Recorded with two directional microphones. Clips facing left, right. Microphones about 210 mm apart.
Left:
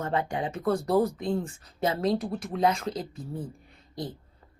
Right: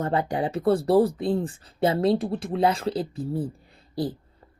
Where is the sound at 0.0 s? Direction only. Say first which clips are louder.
Right 4 dB; 35° right (ahead or behind).